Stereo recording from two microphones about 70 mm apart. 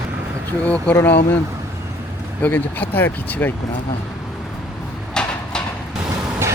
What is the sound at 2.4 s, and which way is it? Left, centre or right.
Speech, left.